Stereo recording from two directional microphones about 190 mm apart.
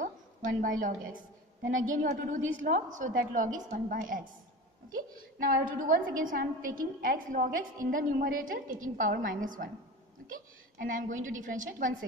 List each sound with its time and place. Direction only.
0.0 s a woman's voice: 45° right (ahead or behind)